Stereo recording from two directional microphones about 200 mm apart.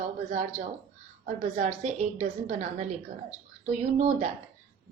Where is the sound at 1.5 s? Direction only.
30° right (ahead or behind).